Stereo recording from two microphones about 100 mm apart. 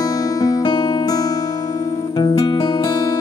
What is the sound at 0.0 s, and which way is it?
Music, 35° left (ahead or behind).